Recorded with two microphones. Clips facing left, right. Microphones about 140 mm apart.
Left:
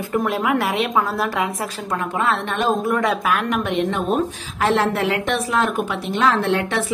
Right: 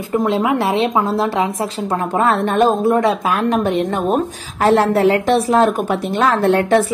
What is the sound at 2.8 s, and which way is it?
A woman's voice, 30° right (ahead or behind).